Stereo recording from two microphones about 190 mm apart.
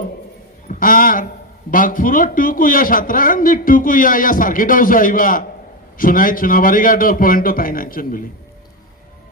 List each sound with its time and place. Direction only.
0.7 s a man's voice: 45° left (ahead or behind)